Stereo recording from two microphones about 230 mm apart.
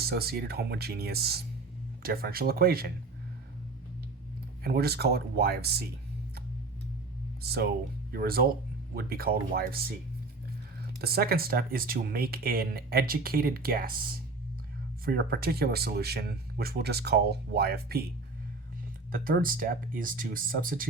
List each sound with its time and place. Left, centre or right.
0.0 s speech: right
4.6 s speech: right
7.4 s speech: right
11.0 s speech: right
19.1 s speech: right